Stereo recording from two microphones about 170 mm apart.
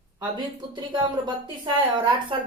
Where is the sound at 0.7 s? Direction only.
25° right (ahead or behind).